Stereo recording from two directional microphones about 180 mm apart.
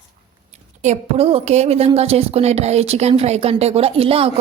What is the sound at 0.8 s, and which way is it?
A woman's voice, 35° right (ahead or behind).